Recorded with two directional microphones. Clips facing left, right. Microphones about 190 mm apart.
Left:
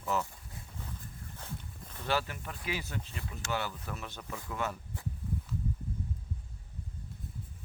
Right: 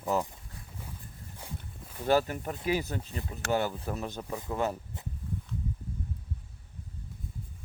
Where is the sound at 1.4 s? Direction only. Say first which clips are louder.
Right 2 dB; 10° right (ahead or behind).